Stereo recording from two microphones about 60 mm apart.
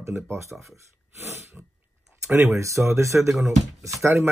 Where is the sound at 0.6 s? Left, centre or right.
Right.